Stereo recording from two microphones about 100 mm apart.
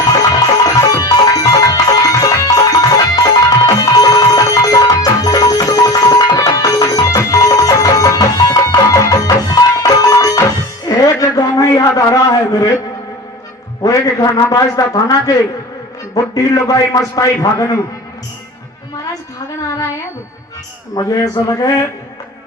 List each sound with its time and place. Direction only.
0.1 s music: 35° left (ahead or behind)
13.8 s a man's voice: 35° left (ahead or behind)
20.9 s a man's voice: 35° left (ahead or behind)